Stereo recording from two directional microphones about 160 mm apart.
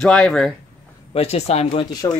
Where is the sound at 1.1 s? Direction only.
40° left (ahead or behind).